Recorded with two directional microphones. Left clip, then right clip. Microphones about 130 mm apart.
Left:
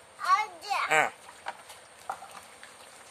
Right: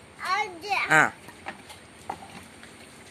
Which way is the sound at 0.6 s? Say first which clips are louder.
Right 5 dB; 20° left (ahead or behind).